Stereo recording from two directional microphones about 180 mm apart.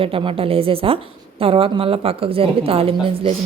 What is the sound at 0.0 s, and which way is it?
A woman's voice, 30° right (ahead or behind).